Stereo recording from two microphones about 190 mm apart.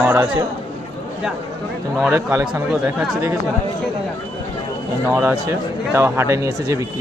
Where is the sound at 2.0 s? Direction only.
5° right (ahead or behind).